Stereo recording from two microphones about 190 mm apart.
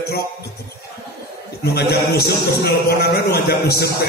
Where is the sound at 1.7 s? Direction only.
55° left (ahead or behind).